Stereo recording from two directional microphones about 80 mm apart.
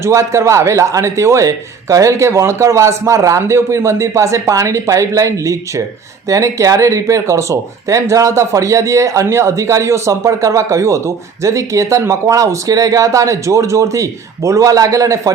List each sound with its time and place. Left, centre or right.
0.0 s speech: right